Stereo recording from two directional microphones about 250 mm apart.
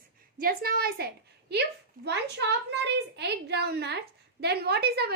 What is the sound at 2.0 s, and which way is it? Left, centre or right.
A woman's voice, right.